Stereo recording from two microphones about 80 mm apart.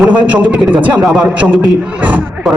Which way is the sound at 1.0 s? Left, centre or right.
Centre.